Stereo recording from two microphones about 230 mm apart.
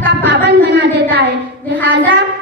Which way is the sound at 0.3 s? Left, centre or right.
Right.